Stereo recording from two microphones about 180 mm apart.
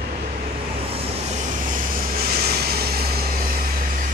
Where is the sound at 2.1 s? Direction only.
55° right (ahead or behind).